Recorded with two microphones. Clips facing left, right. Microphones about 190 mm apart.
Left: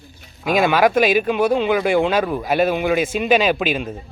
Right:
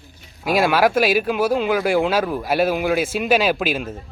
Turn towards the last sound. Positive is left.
turn(degrees=-5)  # may be behind; listen again after turning